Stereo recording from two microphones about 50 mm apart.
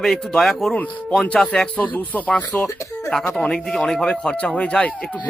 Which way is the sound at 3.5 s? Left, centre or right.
Centre.